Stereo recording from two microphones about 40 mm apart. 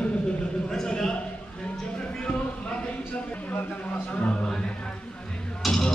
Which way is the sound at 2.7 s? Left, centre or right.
Left.